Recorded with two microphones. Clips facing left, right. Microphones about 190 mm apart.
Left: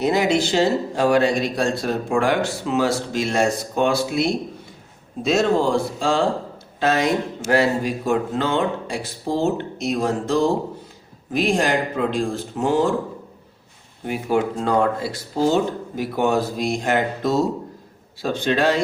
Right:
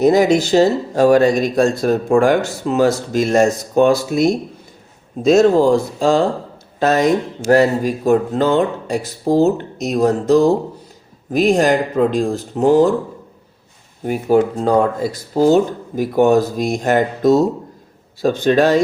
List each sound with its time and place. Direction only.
0.0 s speech: 45° right (ahead or behind)
14.0 s speech: 40° right (ahead or behind)